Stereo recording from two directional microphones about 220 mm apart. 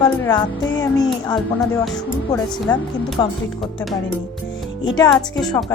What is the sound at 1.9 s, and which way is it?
Speech, 5° left (ahead or behind).